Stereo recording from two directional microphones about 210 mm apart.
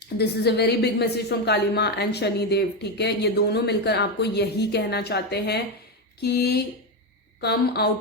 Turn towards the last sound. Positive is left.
turn(degrees=50)  # may be behind; listen again after turning